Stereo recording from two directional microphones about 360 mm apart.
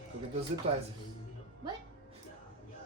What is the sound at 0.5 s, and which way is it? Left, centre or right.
Speech, centre.